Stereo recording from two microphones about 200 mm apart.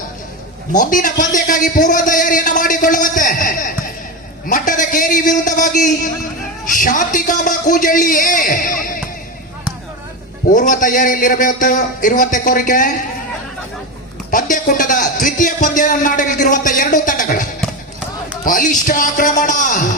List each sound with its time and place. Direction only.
0.7 s a man's voice: 40° left (ahead or behind)
10.5 s a man's voice: 40° left (ahead or behind)
14.3 s a sound: 40° left (ahead or behind)
18.4 s a man's voice: 40° left (ahead or behind)